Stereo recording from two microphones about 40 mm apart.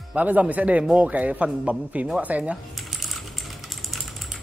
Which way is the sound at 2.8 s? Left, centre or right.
Centre.